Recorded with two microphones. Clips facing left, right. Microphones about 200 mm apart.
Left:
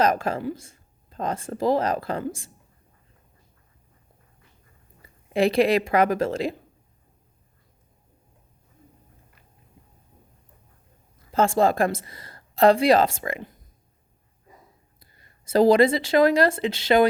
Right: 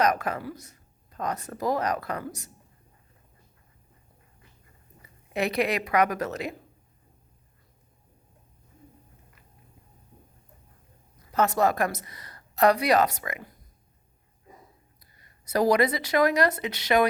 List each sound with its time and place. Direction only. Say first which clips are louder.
0.0 s speech: left 3 dB; 25° left (ahead or behind)
5.3 s speech: left 7 dB; 30° left (ahead or behind)
11.3 s speech: left 3 dB; 25° left (ahead or behind)
15.2 s speech: left 6 dB; 25° left (ahead or behind)